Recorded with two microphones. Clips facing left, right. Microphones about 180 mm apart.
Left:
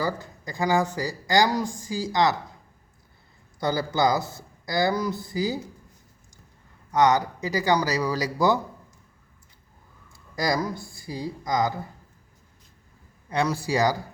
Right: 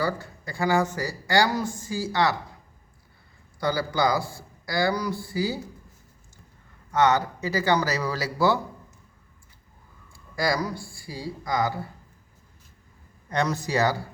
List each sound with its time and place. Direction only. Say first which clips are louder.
0.0 s speech: right 1 dB; 15° left (ahead or behind)
3.6 s speech: left 1 dB; 20° left (ahead or behind)
6.9 s speech: left 1 dB; 15° left (ahead or behind)
10.1 s speech: even; 20° left (ahead or behind)
13.3 s speech: left 1 dB; 10° left (ahead or behind)